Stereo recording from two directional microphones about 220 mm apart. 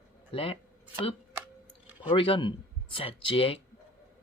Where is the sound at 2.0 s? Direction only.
25° left (ahead or behind).